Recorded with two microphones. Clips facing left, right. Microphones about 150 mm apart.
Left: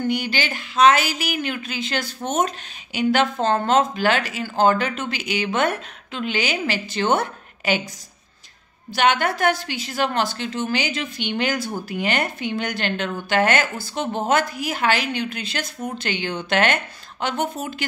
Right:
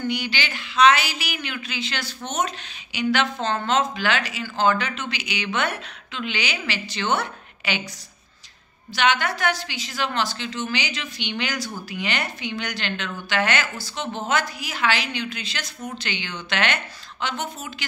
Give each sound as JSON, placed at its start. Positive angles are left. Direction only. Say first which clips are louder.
{"t": 0.0, "sound": "speech", "louder": "left 4 dB", "side_deg": 45}
{"t": 8.9, "sound": "speech", "louder": "left 3 dB", "side_deg": 50}